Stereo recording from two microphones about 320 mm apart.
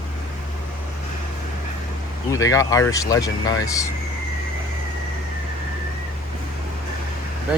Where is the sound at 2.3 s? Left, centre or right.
Centre.